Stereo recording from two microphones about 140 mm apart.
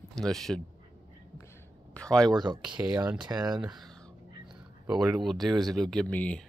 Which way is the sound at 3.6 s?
5° right (ahead or behind).